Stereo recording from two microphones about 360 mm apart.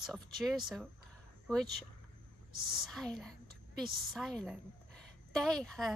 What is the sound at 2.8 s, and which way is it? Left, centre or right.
A woman's voice, centre.